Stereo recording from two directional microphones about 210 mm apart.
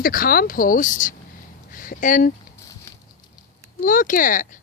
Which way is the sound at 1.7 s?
40° left (ahead or behind).